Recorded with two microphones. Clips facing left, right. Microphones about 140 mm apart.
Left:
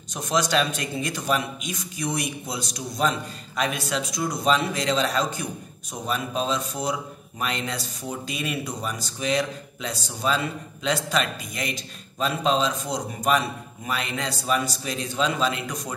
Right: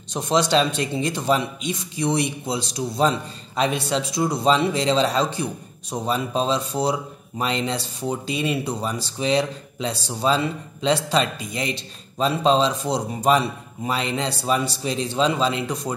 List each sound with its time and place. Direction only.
0.1 s a man's voice: 25° right (ahead or behind)